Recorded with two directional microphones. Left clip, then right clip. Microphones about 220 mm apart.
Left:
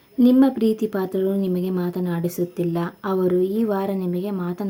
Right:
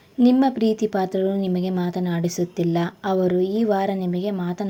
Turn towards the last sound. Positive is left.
turn(degrees=-5)  # may be behind; listen again after turning